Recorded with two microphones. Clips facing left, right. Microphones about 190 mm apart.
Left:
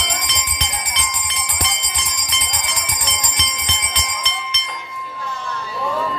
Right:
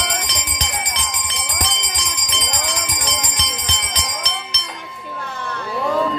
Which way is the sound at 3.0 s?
35° right (ahead or behind).